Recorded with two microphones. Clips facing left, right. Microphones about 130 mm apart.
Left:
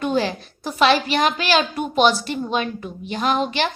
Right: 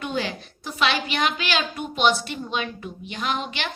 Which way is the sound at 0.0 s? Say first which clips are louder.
Left 7 dB; 35° left (ahead or behind).